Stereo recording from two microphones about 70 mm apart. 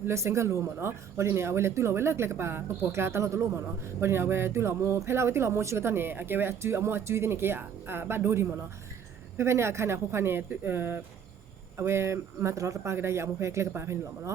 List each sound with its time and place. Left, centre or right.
0.0 s speech: right